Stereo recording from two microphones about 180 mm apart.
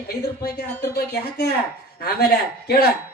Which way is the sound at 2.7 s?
65° left (ahead or behind).